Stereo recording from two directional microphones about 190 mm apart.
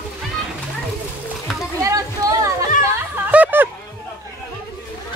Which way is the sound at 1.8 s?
15° right (ahead or behind).